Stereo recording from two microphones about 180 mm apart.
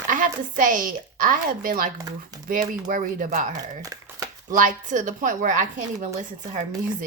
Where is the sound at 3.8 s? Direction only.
20° right (ahead or behind).